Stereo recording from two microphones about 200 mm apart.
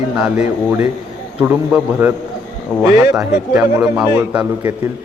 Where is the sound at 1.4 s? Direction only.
10° right (ahead or behind).